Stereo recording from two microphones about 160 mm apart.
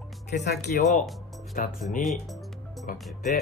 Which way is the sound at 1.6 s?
60° left (ahead or behind).